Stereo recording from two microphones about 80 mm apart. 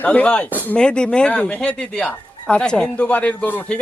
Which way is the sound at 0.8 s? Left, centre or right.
Centre.